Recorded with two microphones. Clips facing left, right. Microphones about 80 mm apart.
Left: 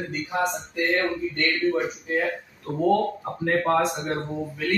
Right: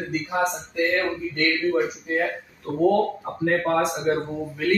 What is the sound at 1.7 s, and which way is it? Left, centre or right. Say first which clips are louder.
Speech: right 2 dB; centre.